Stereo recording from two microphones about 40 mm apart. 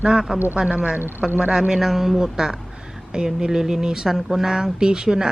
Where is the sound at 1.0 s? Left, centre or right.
Right.